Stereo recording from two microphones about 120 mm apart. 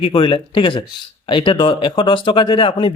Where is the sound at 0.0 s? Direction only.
45° left (ahead or behind).